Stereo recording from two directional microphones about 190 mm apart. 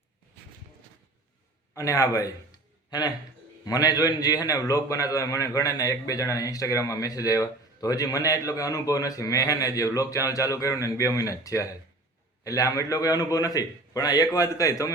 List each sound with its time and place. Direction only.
1.7 s a man's voice: 15° left (ahead or behind)
3.7 s a man's voice: 20° left (ahead or behind)